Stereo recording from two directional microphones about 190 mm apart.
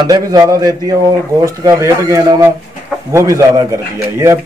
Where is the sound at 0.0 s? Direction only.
20° right (ahead or behind).